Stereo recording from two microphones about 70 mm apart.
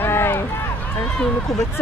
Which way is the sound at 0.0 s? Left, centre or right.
Left.